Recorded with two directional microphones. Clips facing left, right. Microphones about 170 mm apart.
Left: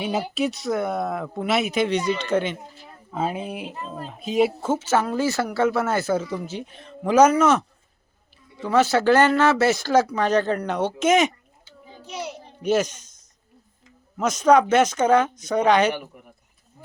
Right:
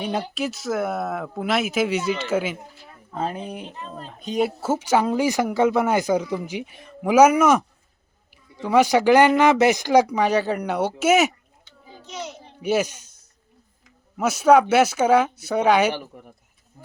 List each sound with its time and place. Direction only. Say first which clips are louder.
0.0 s speech: left 2 dB; 5° left (ahead or behind)
3.1 s speech: left 1 dB; 5° left (ahead or behind)
4.7 s speech: right 2 dB; 15° right (ahead or behind)
8.6 s speech: right 2 dB; 15° right (ahead or behind)
11.6 s a sound: left 1 dB; 10° left (ahead or behind)
12.6 s speech: left 1 dB; 10° right (ahead or behind)